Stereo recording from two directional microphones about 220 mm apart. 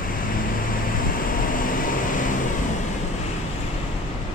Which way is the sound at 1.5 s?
40° left (ahead or behind).